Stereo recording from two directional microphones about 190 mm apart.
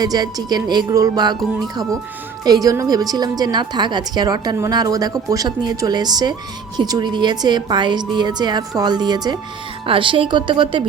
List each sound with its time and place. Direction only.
0.0 s a woman's voice: 20° right (ahead or behind)